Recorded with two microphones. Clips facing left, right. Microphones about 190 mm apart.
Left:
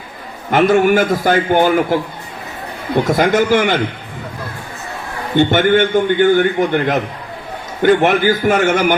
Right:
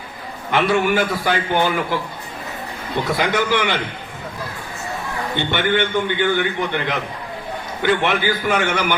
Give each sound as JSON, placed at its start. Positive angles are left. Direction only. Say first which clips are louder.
{"t": 0.5, "sound": "a man's voice", "louder": "left 6 dB", "side_deg": 45}
{"t": 5.4, "sound": "a man's voice", "louder": "left 9 dB", "side_deg": 45}